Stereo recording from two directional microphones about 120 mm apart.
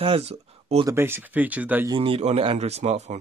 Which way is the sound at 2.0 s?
55° right (ahead or behind).